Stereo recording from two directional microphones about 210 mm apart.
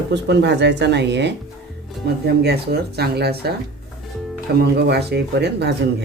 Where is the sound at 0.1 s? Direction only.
55° right (ahead or behind).